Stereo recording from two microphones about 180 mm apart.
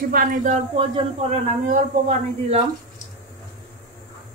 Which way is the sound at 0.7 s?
30° right (ahead or behind).